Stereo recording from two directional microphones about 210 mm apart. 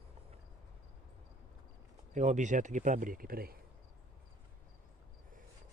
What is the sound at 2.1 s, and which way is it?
Speech, 35° right (ahead or behind).